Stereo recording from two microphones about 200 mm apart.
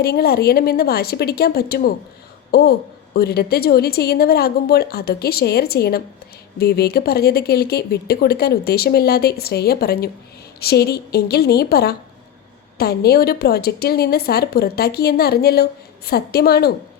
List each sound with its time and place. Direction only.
0.0 s a woman's voice: 50° left (ahead or behind)